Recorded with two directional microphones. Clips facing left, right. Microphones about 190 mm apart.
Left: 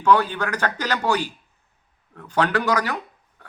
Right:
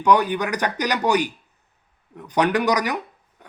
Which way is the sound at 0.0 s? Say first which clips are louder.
Right 1 dB; 15° right (ahead or behind).